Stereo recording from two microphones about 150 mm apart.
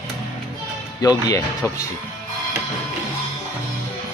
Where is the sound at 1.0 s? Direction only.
25° left (ahead or behind).